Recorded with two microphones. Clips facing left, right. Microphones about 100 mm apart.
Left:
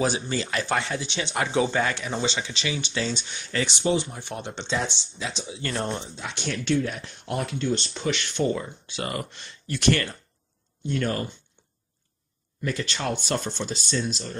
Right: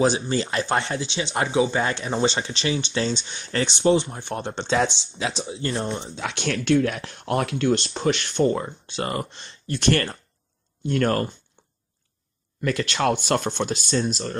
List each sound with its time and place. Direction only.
0.0 s speech: 30° right (ahead or behind)
1.5 s speech: 15° right (ahead or behind)
1.8 s speech: 25° right (ahead or behind)
4.6 s speech: 80° right
5.5 s speech: 35° right (ahead or behind)
6.1 s speech: 85° right; by 10.1 s 35° right (ahead or behind)
10.9 s speech: 55° right (ahead or behind)
12.6 s speech: 75° right (ahead or behind); by 14.3 s 45° right (ahead or behind)